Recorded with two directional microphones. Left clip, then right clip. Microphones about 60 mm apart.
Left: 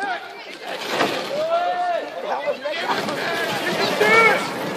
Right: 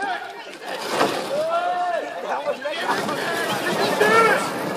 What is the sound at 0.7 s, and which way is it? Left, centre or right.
Vehicle, right.